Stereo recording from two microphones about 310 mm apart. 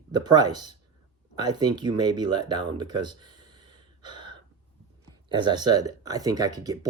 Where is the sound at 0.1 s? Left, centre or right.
Centre.